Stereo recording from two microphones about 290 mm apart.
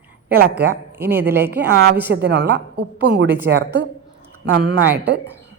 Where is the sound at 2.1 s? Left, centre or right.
Right.